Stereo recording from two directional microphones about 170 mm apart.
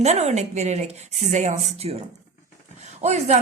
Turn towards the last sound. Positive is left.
turn(degrees=-40)  # may be behind; listen again after turning